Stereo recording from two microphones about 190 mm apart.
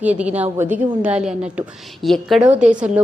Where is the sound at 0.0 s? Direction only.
5° right (ahead or behind).